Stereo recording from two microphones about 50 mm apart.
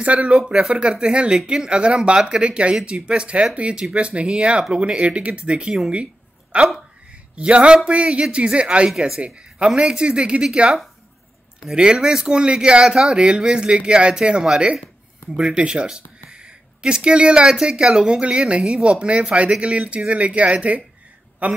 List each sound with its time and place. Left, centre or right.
0.0 s a man's voice: right
8.9 s speech: centre
9.8 s a man's voice: centre
11.7 s a man's voice: centre